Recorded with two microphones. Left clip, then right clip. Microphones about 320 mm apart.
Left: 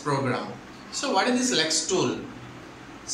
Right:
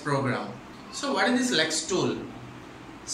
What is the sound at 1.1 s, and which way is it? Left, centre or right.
Speech, centre.